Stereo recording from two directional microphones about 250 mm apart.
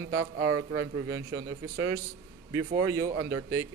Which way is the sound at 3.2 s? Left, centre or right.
Right.